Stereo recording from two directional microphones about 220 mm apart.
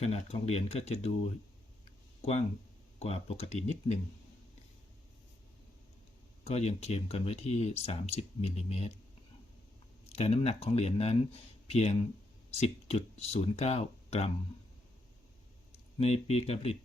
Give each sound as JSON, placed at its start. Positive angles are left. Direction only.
{"t": 0.0, "sound": "speech", "side_deg": 30}
{"t": 3.0, "sound": "speech", "side_deg": 30}
{"t": 6.4, "sound": "speech", "side_deg": 30}
{"t": 10.1, "sound": "speech", "side_deg": 30}
{"t": 16.0, "sound": "speech", "side_deg": 30}